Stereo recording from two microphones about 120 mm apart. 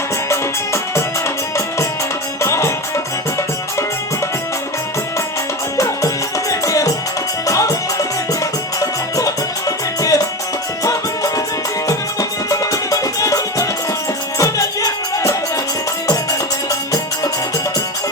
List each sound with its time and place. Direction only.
0.3 s music: 25° left (ahead or behind)
2.4 s music: 25° left (ahead or behind)
5.7 s music: 25° left (ahead or behind)
12.5 s music: 30° left (ahead or behind)